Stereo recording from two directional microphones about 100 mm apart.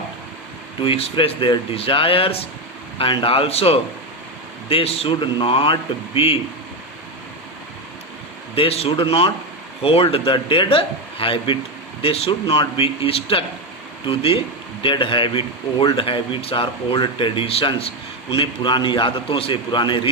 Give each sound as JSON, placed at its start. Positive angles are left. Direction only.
{"t": 0.8, "sound": "speech", "side_deg": 65}
{"t": 6.1, "sound": "speech", "side_deg": 75}
{"t": 8.5, "sound": "a man's voice", "side_deg": 85}
{"t": 8.9, "sound": "speech", "side_deg": 60}
{"t": 14.1, "sound": "speech", "side_deg": 65}